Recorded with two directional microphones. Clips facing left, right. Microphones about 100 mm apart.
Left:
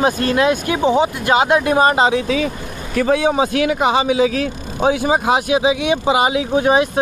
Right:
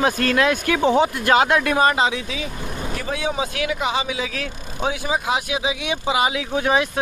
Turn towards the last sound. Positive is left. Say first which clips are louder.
# left 5 dB
turn(degrees=25)  # may be behind; listen again after turning